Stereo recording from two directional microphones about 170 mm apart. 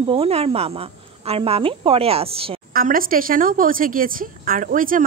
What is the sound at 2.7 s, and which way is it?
A woman's voice, 55° right (ahead or behind).